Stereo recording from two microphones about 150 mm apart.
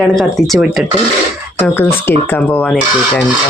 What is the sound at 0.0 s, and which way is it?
Speech, centre (ahead or behind).